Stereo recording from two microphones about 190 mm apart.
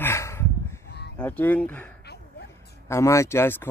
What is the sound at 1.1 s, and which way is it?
Speech, 10° left (ahead or behind).